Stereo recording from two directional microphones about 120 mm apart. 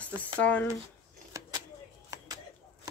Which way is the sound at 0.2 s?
10° left (ahead or behind).